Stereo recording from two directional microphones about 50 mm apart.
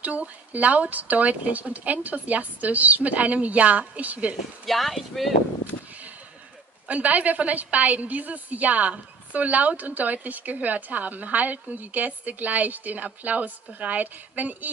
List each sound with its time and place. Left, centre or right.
0.0 s a woman's voice: right
4.6 s speech: centre
6.9 s a woman's voice: right